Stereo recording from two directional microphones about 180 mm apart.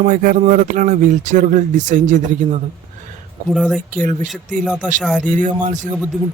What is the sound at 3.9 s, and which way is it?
Speech, 45° right (ahead or behind).